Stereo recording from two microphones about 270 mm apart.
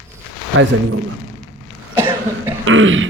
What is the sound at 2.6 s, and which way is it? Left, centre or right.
Speech, right.